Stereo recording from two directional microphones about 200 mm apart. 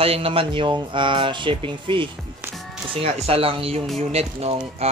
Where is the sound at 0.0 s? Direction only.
30° right (ahead or behind).